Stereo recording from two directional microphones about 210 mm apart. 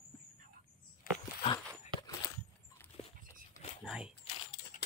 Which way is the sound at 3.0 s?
25° left (ahead or behind).